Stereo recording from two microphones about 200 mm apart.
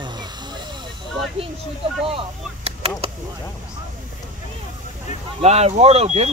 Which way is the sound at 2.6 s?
30° right (ahead or behind).